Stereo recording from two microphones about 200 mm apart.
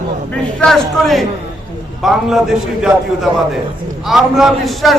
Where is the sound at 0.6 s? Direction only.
Centre (ahead or behind).